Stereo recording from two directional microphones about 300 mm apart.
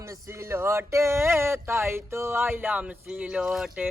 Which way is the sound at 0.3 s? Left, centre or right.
Centre.